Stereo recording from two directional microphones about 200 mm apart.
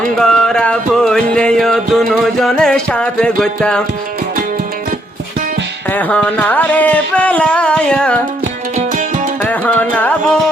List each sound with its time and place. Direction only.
0.0 s music: centre (ahead or behind)
5.9 s a sound: 10° left (ahead or behind)
8.7 s music: 40° right (ahead or behind)
9.4 s music: 10° left (ahead or behind)